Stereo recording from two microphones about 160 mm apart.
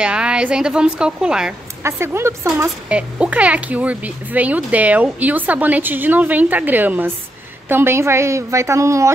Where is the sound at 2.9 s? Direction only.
5° right (ahead or behind).